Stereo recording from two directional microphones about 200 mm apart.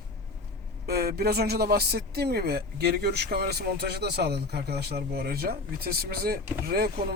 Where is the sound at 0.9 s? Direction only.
50° right (ahead or behind).